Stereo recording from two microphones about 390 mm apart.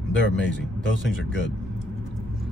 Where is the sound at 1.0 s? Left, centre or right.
Left.